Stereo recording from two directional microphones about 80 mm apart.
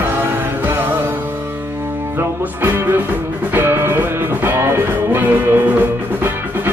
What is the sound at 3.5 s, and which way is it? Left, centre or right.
Music, right.